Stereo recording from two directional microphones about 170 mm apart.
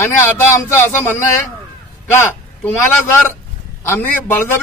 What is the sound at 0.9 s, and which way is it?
A man's voice, 10° left (ahead or behind).